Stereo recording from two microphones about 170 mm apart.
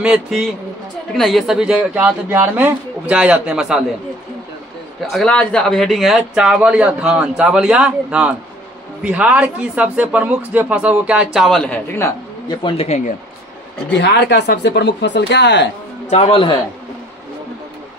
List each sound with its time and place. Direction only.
0.0 s speech: centre (ahead or behind)
5.1 s speech: 5° left (ahead or behind)
12.0 s speech: 25° left (ahead or behind)
13.9 s speech: 85° left
16.1 s speech: 35° left (ahead or behind)